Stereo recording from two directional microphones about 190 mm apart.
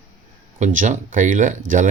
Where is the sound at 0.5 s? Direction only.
40° right (ahead or behind).